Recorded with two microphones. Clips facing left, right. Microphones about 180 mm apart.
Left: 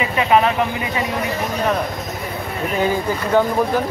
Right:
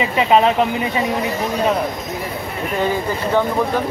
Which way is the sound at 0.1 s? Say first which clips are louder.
Right 1 dB; 25° right (ahead or behind).